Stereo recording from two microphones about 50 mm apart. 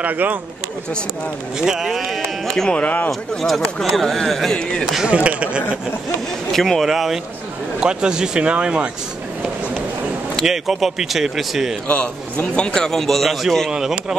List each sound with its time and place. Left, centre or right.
0.0 s speech: right
1.6 s speech: centre
2.7 s speech: left
3.1 s speech: centre
5.0 s speech: right
6.5 s speech: centre
6.9 s speech: centre
7.8 s speech: centre
10.4 s speech: centre
11.9 s a man's voice: left; by 13.5 s centre
13.7 s speech: centre